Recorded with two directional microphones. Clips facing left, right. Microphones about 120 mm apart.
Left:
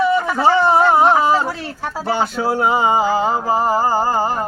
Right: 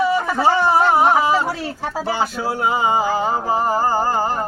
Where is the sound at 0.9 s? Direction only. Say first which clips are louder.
Left 2 dB; 20° left (ahead or behind).